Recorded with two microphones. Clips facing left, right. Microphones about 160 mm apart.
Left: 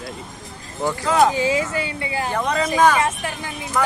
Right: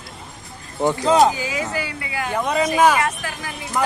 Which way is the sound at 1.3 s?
30° left (ahead or behind).